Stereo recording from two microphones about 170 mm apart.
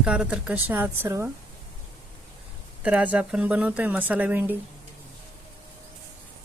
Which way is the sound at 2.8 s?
10° right (ahead or behind).